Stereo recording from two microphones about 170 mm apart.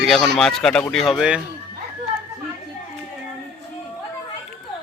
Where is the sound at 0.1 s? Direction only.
Centre (ahead or behind).